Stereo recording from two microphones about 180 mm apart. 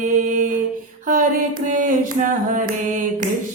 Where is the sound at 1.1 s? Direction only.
45° right (ahead or behind).